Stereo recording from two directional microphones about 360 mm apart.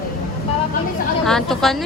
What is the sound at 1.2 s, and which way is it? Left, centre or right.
Speech, centre.